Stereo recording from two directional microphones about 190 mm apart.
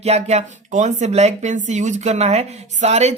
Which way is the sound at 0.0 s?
35° right (ahead or behind).